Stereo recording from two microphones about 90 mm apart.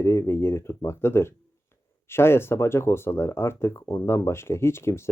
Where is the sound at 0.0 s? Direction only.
30° left (ahead or behind).